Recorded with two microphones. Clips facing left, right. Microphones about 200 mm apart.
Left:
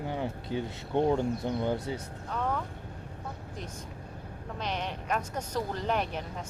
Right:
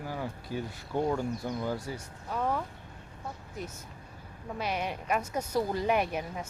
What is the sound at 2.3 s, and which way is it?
Speech, 10° right (ahead or behind).